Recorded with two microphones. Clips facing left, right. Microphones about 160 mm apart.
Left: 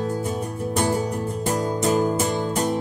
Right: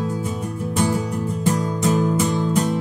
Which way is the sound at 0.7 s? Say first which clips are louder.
Right 1 dB; 45° left (ahead or behind).